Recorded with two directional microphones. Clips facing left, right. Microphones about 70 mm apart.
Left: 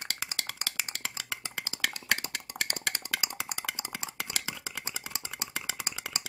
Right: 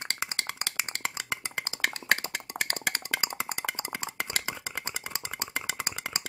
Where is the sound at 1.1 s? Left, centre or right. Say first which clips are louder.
Right 4 dB; right.